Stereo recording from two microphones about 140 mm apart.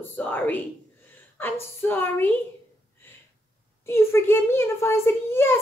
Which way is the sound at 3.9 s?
20° left (ahead or behind).